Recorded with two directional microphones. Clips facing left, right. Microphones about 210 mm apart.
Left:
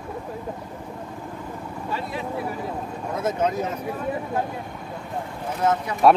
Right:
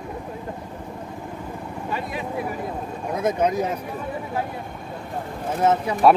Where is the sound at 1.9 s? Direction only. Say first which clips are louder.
Even; 15° right (ahead or behind).